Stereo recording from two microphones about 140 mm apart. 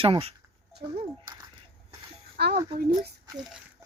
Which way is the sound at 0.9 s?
35° right (ahead or behind).